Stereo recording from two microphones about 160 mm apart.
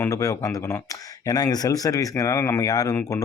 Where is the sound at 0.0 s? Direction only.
20° left (ahead or behind).